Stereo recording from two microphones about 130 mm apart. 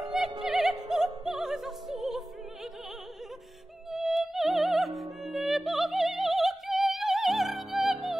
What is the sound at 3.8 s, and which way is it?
Music, centre (ahead or behind).